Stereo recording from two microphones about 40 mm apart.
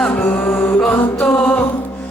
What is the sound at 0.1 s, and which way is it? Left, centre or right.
Music, left.